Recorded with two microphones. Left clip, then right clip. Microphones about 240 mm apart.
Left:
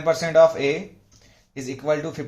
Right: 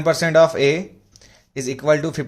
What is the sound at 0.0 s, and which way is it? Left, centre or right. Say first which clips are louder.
Speech: right 2 dB; right.